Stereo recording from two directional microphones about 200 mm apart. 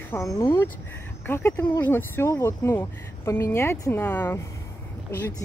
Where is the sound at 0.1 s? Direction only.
15° left (ahead or behind).